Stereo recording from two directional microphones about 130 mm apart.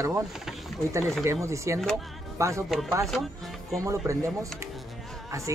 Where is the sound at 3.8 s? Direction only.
25° right (ahead or behind).